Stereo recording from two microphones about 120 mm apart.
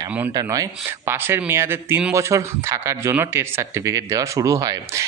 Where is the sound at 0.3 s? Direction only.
30° right (ahead or behind).